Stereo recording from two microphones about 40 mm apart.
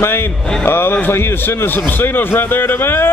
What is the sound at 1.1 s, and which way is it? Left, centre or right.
Speech, left.